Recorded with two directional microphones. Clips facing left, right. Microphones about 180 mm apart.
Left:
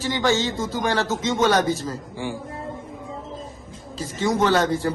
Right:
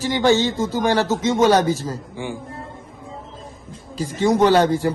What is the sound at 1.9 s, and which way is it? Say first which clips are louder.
Speech: right 1 dB; 15° right (ahead or behind).